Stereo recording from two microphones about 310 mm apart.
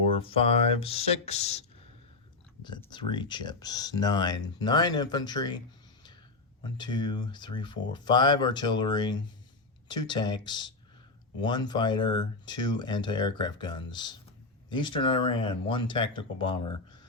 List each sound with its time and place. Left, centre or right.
0.1 s speech: centre